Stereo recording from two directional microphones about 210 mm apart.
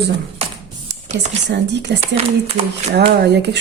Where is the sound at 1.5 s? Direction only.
55° right (ahead or behind).